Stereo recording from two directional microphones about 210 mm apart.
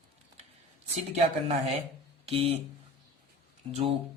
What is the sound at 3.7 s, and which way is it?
Speech, 25° right (ahead or behind).